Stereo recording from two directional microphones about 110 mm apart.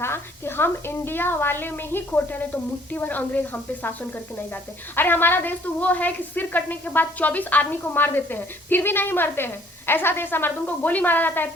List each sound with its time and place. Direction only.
0.0 s a woman's voice: 20° left (ahead or behind)